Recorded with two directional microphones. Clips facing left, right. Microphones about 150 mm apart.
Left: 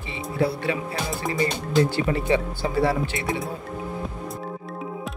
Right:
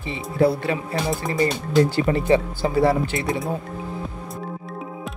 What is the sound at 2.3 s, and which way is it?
Speech, 40° right (ahead or behind).